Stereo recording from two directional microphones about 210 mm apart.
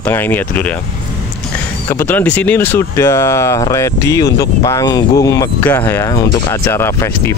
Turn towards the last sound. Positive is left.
turn(degrees=10)  # may be behind; listen again after turning